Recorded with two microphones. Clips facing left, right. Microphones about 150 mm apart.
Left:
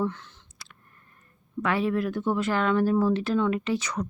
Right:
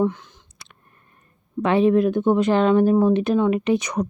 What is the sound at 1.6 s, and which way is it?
Speech, 20° right (ahead or behind).